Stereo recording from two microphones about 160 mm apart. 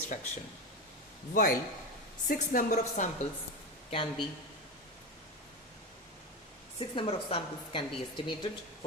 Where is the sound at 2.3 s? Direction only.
55° left (ahead or behind).